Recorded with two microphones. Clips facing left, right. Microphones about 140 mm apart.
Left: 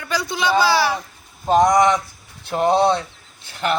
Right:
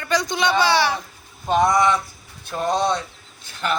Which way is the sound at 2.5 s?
65° left (ahead or behind).